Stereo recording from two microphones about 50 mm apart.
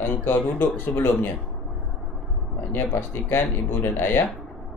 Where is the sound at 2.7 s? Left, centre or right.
Left.